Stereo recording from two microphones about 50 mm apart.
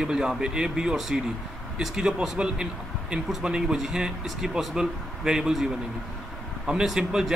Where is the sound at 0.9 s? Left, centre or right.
Centre.